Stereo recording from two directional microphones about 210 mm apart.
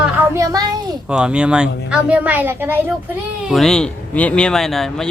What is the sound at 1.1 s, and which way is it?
Speech, 5° right (ahead or behind).